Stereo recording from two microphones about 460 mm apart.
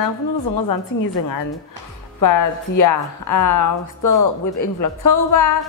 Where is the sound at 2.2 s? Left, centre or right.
Left.